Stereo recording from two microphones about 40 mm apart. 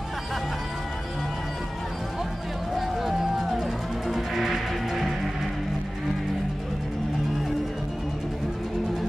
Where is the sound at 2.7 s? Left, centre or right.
Centre.